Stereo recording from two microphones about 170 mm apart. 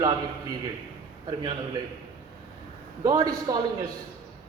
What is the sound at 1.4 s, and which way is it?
Speech, 25° right (ahead or behind).